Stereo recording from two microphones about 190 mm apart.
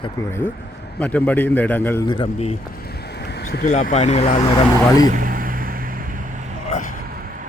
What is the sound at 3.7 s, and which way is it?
Speech, 35° left (ahead or behind).